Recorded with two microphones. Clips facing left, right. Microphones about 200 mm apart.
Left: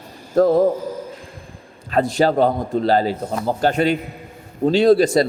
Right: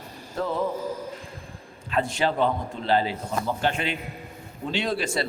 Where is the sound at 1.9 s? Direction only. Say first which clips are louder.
Left 8 dB; 40° left (ahead or behind).